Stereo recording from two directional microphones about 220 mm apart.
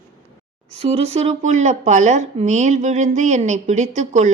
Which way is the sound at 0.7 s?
30° right (ahead or behind).